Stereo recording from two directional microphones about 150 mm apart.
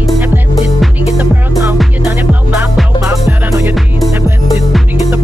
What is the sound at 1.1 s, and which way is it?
Music, 15° right (ahead or behind).